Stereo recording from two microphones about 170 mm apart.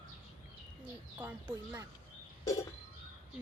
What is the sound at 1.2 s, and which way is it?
Speech, 10° right (ahead or behind).